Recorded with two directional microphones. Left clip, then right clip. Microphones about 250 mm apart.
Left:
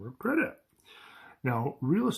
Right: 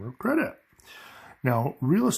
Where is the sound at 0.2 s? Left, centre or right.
Right.